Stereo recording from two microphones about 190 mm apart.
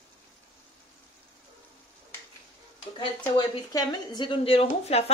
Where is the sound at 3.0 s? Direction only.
25° left (ahead or behind).